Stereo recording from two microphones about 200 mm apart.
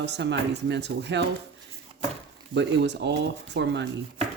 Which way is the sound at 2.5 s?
60° right (ahead or behind).